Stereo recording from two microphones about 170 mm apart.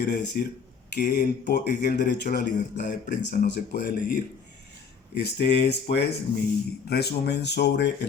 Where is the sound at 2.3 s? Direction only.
45° left (ahead or behind).